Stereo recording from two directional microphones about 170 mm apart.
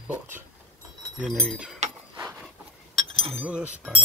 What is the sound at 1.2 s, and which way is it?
Speech, centre (ahead or behind).